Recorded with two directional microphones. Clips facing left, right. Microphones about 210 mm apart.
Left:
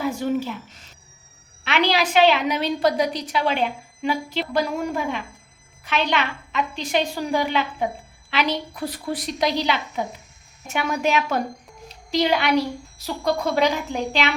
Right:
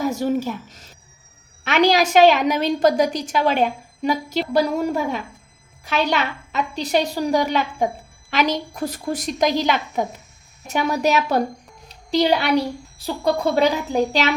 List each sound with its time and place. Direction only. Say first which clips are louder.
0.0 s a woman's voice: right 2 dB; 40° right (ahead or behind)